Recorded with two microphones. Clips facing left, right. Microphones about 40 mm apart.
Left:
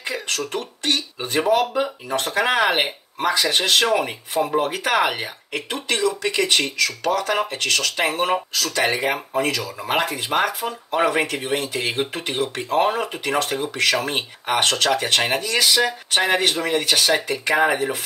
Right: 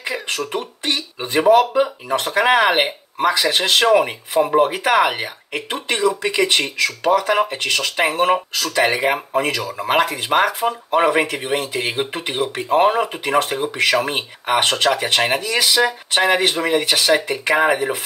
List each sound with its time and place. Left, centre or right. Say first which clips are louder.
0.0 s speech: right 2 dB; right
3.5 s speech: right 5 dB; right
10.0 s speech: right 2 dB; right
10.3 s speech: right 5 dB; right